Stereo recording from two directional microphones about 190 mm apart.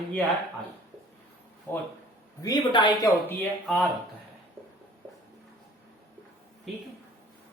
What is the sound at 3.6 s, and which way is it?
Speech, centre (ahead or behind).